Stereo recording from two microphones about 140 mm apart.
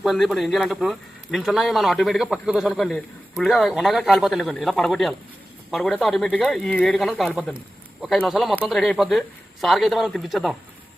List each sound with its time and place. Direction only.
0.0 s speech: centre (ahead or behind)
8.3 s speech: centre (ahead or behind)